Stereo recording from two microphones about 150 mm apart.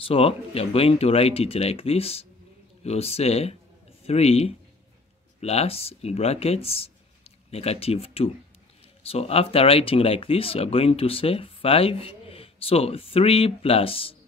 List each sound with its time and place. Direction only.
0.0 s a man's voice: 40° left (ahead or behind)